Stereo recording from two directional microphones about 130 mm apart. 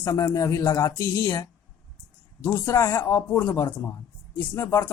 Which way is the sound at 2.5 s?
20° left (ahead or behind).